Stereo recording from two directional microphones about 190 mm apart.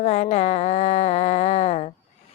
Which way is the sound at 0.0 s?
35° left (ahead or behind).